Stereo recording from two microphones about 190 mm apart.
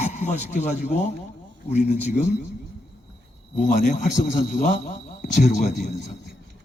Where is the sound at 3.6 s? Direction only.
40° left (ahead or behind).